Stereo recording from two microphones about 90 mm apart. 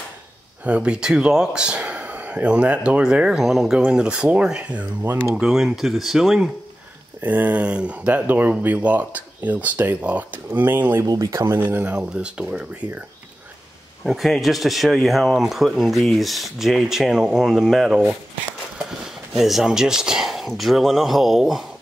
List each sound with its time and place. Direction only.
0.7 s speech: 10° right (ahead or behind)
5.0 s speech: 25° right (ahead or behind)
5.3 s speech: 5° right (ahead or behind)
7.2 s speech: 20° right (ahead or behind)
11.1 s speech: 40° right (ahead or behind)
11.6 s speech: 15° right (ahead or behind)
14.0 s speech: centre (ahead or behind)